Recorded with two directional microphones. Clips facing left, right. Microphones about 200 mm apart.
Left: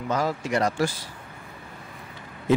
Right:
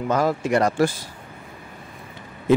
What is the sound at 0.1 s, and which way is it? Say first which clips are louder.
Speech: right 5 dB; 55° right (ahead or behind).